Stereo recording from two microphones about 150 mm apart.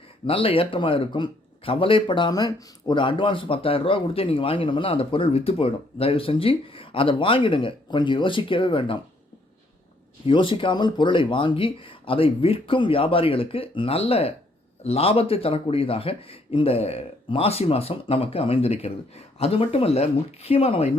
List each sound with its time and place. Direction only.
0.3 s speech: 35° left (ahead or behind)
10.2 s speech: 35° left (ahead or behind)